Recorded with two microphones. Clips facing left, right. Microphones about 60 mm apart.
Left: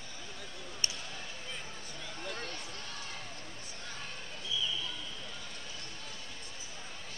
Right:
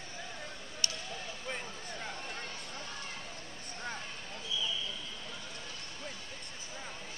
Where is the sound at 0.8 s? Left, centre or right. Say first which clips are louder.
Right 1 dB; left.